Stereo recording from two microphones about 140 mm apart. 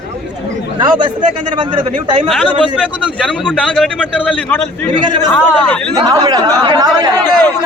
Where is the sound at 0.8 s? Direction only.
35° right (ahead or behind).